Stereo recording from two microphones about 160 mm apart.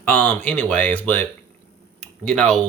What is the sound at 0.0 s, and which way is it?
Speech, 10° left (ahead or behind).